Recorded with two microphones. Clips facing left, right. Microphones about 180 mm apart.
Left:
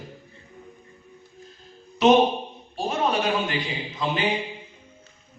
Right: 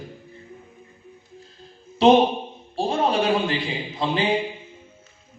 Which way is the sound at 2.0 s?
30° right (ahead or behind).